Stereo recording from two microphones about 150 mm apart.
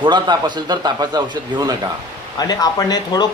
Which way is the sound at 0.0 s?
30° right (ahead or behind).